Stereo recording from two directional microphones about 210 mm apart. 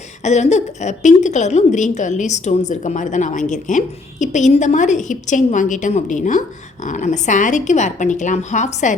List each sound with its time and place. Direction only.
0.2 s a woman's voice: 35° left (ahead or behind)